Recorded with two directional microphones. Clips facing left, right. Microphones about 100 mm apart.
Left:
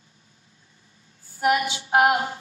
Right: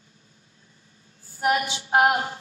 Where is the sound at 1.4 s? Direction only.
30° right (ahead or behind).